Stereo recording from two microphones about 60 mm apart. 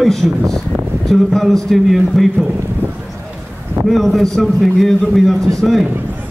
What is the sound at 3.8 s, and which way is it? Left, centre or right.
A man's voice, centre.